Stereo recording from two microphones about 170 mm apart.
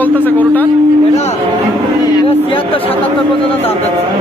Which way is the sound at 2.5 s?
35° left (ahead or behind).